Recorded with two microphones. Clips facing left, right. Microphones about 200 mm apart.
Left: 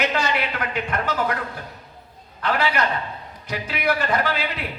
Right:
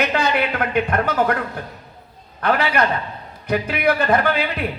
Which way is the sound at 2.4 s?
55° right (ahead or behind).